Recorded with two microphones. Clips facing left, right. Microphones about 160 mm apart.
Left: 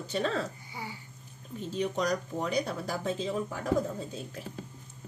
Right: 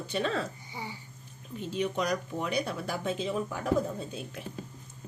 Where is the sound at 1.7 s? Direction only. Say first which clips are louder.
Even; 40° left (ahead or behind).